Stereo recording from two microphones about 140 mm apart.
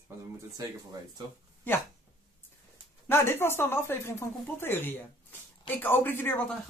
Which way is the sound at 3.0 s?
15° left (ahead or behind).